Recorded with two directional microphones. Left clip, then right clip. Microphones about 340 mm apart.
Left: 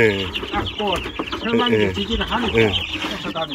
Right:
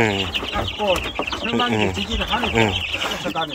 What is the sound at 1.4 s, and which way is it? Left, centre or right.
Speech, centre.